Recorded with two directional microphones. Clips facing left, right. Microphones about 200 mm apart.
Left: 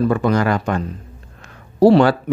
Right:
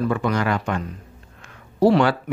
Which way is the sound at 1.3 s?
35° left (ahead or behind).